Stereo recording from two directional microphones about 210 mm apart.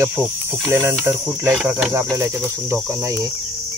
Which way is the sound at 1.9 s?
15° right (ahead or behind).